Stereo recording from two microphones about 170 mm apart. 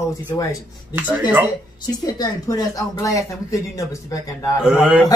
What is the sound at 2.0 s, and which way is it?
A woman's voice, 20° left (ahead or behind).